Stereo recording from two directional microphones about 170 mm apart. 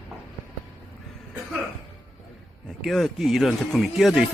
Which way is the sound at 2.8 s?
Centre (ahead or behind).